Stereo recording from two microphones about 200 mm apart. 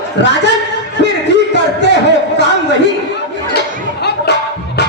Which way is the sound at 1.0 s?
60° left (ahead or behind).